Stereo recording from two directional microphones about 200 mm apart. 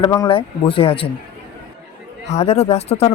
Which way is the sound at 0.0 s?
20° left (ahead or behind).